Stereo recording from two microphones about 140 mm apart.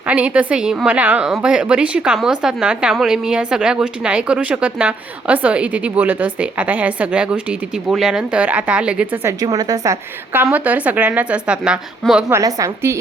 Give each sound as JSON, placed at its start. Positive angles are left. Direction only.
{"t": 0.0, "sound": "a woman's voice", "side_deg": -10}
{"t": 9.4, "sound": "a woman's voice", "side_deg": -25}
{"t": 10.5, "sound": "a woman's voice", "side_deg": -10}
{"t": 12.3, "sound": "a woman's voice", "side_deg": -25}